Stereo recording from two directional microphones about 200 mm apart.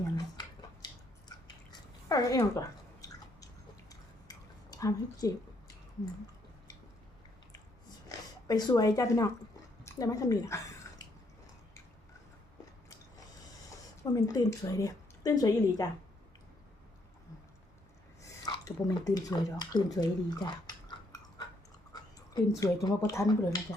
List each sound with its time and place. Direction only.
2.0 s chewing: 20° left (ahead or behind)
7.5 s a sound: 20° left (ahead or behind)
14.0 s speech: 15° left (ahead or behind)
18.2 s drip: 20° left (ahead or behind)
22.6 s speech: 15° left (ahead or behind)